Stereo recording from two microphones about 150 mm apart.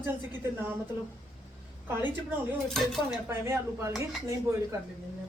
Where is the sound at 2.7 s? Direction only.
5° left (ahead or behind).